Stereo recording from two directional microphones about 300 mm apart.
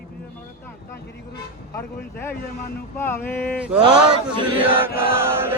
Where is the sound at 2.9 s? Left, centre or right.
Centre.